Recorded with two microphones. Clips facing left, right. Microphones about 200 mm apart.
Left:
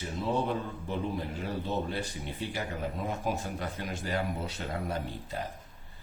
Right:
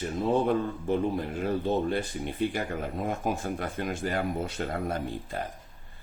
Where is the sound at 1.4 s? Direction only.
50° right (ahead or behind).